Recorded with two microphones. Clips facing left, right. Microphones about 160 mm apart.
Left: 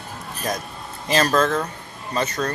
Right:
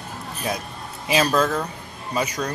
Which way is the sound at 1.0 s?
10° right (ahead or behind).